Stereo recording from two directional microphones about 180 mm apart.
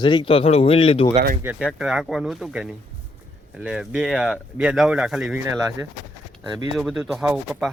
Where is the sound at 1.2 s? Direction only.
40° right (ahead or behind).